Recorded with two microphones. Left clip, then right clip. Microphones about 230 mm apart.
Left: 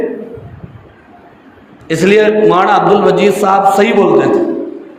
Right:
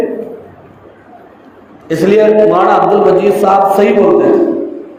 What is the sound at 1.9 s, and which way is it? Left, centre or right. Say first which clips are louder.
A man's voice: right 1 dB; left.